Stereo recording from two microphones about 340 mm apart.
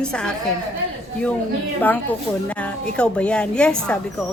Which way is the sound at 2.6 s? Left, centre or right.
Centre.